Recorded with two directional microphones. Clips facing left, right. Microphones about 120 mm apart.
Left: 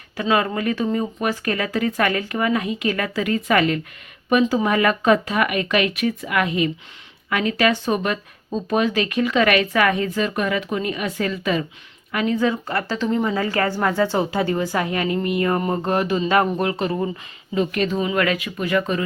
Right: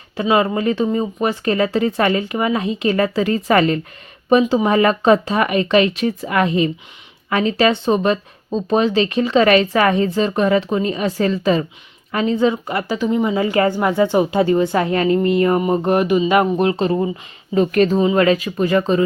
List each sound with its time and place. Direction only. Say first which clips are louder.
0.2 s a woman's voice: right 4 dB; 25° right (ahead or behind); by 13.3 s 10° right (ahead or behind)
13.3 s speech: right 5 dB; 20° right (ahead or behind)
15.5 s a woman's voice: right 5 dB; 15° right (ahead or behind)
17.5 s speech: right 6 dB; 40° right (ahead or behind)
18.0 s speech: right 6 dB; 25° right (ahead or behind)